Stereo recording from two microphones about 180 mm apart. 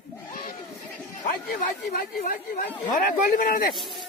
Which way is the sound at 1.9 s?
50° left (ahead or behind).